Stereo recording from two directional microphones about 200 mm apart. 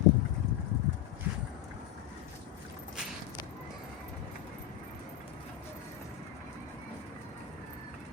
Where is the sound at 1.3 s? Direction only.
5° right (ahead or behind).